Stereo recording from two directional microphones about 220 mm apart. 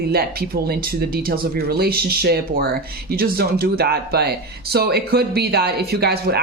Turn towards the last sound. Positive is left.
turn(degrees=-45)  # may be behind; listen again after turning